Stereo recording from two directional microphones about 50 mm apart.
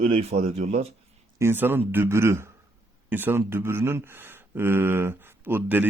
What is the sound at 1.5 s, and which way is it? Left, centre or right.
Speech, right.